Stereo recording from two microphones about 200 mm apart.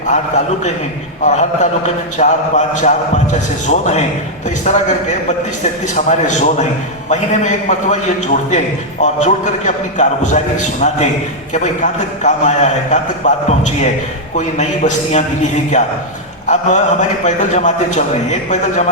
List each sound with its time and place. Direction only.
0.1 s a man's voice: 35° left (ahead or behind)